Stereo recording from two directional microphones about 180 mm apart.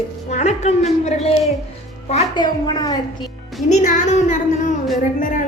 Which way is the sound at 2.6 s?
20° left (ahead or behind).